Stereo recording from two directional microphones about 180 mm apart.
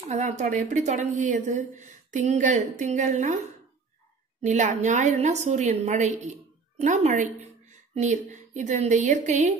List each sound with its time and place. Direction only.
0.1 s a woman's voice: 40° right (ahead or behind)
4.4 s a woman's voice: 40° right (ahead or behind)